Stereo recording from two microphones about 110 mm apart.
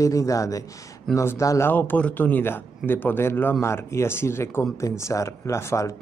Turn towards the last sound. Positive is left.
turn(degrees=25)  # may be behind; listen again after turning